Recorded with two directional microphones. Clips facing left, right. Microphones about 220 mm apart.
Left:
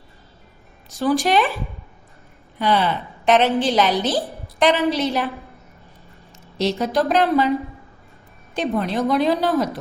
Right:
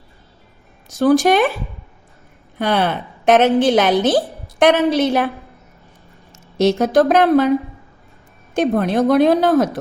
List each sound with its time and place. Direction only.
0.9 s a woman's voice: 45° right (ahead or behind)
2.6 s a woman's voice: 50° right (ahead or behind)
6.3 s speech: 45° right (ahead or behind)
8.5 s a woman's voice: 50° right (ahead or behind)